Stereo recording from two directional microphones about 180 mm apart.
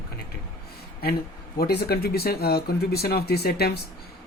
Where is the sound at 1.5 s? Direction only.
60° left (ahead or behind).